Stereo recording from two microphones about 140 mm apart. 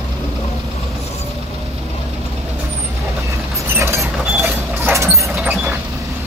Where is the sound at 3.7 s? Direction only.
20° right (ahead or behind).